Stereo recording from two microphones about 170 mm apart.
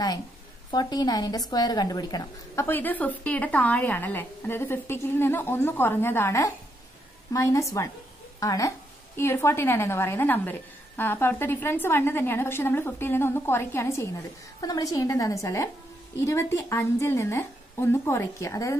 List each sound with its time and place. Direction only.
0.7 s a woman's voice: 25° left (ahead or behind)